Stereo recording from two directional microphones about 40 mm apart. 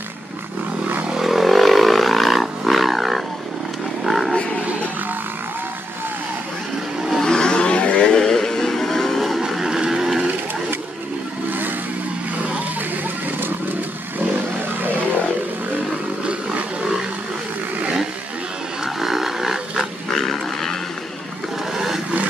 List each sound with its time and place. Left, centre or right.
1.2 s vehicle: centre
4.0 s wild animals: centre
7.2 s a sound: centre
8.2 s music: centre
9.5 s vehicle: centre
13.4 s vehicle: right
18.9 s wild animals: centre
20.1 s pig: centre
21.7 s vehicle: centre